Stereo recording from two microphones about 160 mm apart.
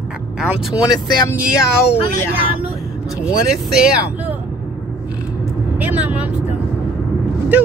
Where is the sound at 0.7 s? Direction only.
25° left (ahead or behind).